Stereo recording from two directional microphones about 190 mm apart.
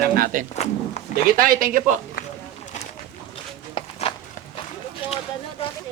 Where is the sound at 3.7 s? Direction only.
30° left (ahead or behind).